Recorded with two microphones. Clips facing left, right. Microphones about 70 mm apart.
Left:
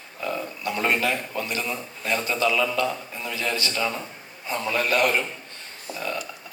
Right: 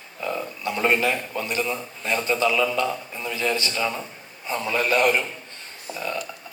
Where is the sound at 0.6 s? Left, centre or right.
Right.